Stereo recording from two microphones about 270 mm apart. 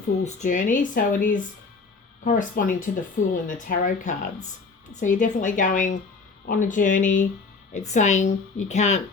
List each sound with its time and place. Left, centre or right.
0.3 s speech: left